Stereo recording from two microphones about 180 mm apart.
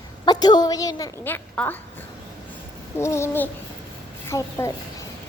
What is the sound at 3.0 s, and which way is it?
A woman's voice, 15° left (ahead or behind).